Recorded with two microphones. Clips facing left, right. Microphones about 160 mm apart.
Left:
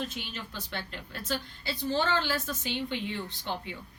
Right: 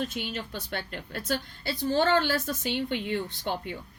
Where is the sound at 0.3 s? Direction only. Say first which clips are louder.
Right 4 dB; 45° right (ahead or behind).